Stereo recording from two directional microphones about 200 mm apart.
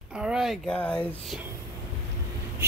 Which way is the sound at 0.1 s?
5° right (ahead or behind).